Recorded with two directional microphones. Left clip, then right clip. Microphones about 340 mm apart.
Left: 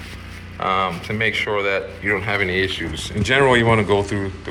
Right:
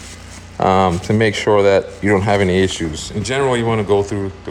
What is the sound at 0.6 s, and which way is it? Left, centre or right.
Speech, right.